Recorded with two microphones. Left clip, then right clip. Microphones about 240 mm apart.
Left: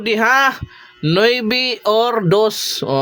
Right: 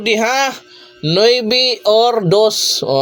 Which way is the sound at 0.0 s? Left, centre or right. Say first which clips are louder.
Left 1 dB; centre.